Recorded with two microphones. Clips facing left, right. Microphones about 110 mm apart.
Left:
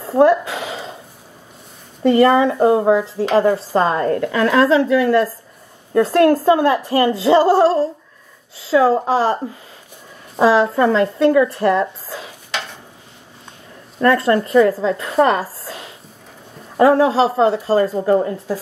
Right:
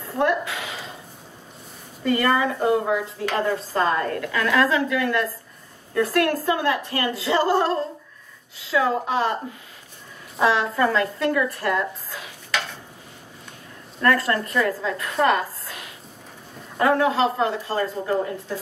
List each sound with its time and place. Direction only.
0.1 s a sound: 30° left (ahead or behind)
2.0 s a woman's voice: 25° left (ahead or behind)
10.4 s speech: 30° left (ahead or behind)
13.9 s a woman's voice: 25° left (ahead or behind)